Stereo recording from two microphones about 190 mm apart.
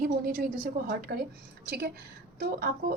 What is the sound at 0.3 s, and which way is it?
Speech, 50° right (ahead or behind).